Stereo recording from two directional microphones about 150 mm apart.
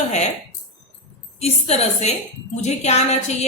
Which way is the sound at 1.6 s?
45° left (ahead or behind).